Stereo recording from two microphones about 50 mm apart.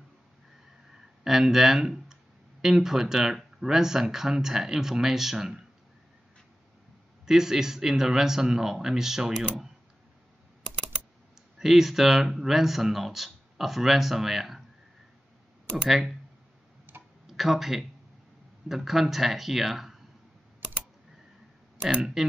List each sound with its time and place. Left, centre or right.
1.2 s speech: centre
7.2 s speech: centre
11.5 s speech: centre
15.9 s speech: centre
16.9 s tick-tock: right
17.3 s speech: centre